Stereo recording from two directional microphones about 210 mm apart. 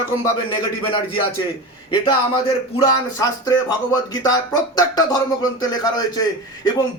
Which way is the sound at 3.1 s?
15° left (ahead or behind).